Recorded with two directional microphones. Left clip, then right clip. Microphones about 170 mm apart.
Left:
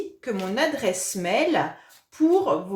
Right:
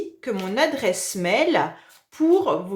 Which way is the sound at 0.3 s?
20° right (ahead or behind).